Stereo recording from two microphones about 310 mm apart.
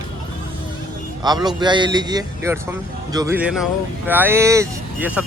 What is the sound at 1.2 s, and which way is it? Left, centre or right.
A man's voice, centre.